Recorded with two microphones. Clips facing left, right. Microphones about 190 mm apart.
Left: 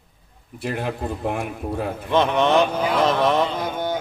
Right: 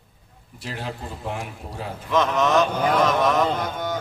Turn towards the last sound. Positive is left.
turn(degrees=30)  # may be behind; listen again after turning